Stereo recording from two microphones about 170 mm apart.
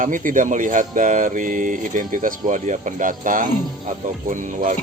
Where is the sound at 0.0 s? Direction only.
50° right (ahead or behind).